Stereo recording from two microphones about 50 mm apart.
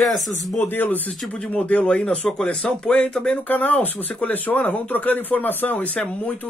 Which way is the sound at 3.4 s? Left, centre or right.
Left.